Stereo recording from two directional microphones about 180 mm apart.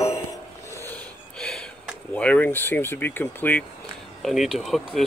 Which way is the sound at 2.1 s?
10° left (ahead or behind).